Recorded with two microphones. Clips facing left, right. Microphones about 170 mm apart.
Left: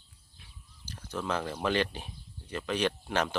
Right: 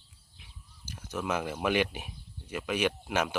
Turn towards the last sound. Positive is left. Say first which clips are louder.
# even
turn(degrees=-10)  # may be behind; listen again after turning